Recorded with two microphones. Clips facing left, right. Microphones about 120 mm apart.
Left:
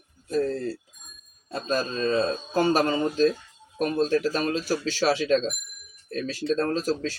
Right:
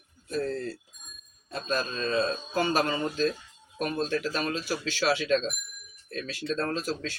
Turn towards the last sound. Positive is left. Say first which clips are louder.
# left 5 dB
turn(degrees=40)  # may be behind; listen again after turning